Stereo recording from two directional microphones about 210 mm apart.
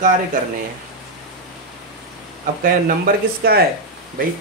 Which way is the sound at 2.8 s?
45° right (ahead or behind).